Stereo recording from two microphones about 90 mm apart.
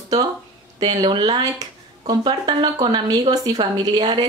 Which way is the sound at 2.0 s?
50° right (ahead or behind).